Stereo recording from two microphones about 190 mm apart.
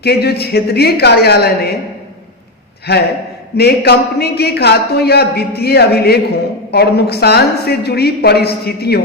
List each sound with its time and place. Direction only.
0.0 s a man's voice: 60° left (ahead or behind)
2.9 s a man's voice: 60° left (ahead or behind)